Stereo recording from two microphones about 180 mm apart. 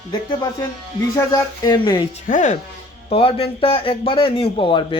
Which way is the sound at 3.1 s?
30° left (ahead or behind).